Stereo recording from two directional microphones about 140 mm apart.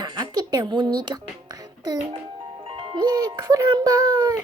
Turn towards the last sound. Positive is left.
turn(degrees=-25)  # may be behind; listen again after turning